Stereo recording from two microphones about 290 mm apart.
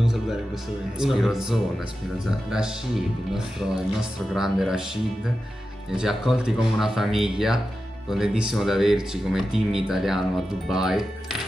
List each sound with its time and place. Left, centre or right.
0.0 s music: centre
0.9 s speech: centre
3.3 s speech: centre
5.9 s speech: centre